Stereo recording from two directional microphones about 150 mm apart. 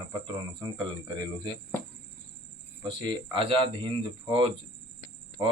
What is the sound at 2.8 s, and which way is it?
Speech, 30° right (ahead or behind).